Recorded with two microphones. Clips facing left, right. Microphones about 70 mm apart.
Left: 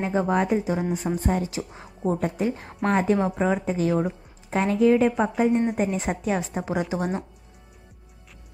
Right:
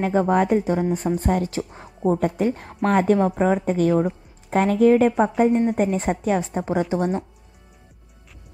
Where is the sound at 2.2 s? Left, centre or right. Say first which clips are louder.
Right 4 dB; right.